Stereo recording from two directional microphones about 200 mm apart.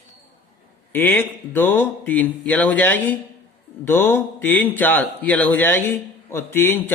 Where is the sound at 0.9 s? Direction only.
10° left (ahead or behind).